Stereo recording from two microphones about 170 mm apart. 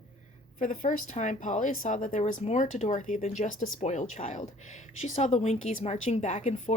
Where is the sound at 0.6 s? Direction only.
50° left (ahead or behind).